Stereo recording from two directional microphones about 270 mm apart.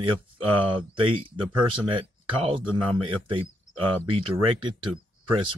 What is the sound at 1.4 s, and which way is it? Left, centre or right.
Speech, centre.